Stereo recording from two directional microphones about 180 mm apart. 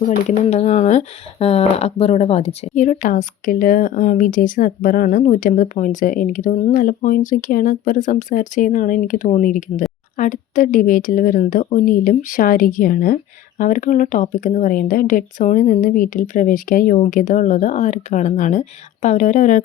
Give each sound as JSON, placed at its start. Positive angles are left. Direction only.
{"t": 0.3, "sound": "speech", "side_deg": 40}